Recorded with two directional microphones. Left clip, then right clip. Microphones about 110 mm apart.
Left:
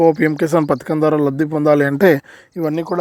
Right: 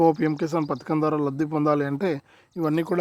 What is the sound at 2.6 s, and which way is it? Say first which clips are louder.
Speech: left 6 dB; 35° left (ahead or behind).